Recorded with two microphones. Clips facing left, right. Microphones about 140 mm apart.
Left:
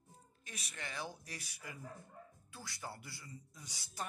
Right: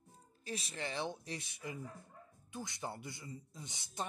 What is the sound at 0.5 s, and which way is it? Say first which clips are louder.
Speech: right 7 dB; 30° right (ahead or behind).